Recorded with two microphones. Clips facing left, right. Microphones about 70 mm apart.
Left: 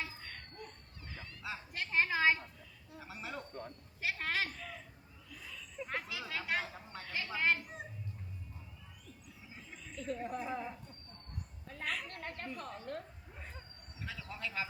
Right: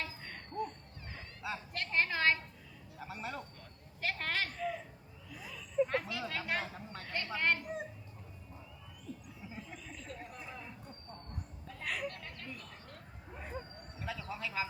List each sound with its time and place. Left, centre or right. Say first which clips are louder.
0.2 s music: right 9 dB; centre
1.4 s a sound: right 3 dB; centre
1.7 s a woman's voice: left 1 dB; centre
4.5 s a man's voice: right 10 dB; centre
9.6 s a sound: left 3 dB; centre
10.4 s a woman's voice: left 8 dB; centre
12.0 s speech: right 1 dB; left
13.3 s a sound: right 8 dB; centre
14.0 s speech: right 3 dB; centre